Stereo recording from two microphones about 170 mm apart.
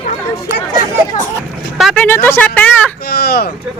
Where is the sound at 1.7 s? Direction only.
Centre (ahead or behind).